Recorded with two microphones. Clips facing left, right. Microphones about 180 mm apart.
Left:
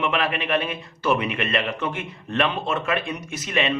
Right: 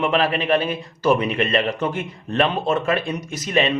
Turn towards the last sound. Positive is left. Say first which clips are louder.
# right 4 dB
turn(degrees=-35)  # may be behind; listen again after turning